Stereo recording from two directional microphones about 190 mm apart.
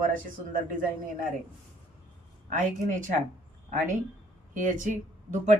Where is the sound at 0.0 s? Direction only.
45° right (ahead or behind).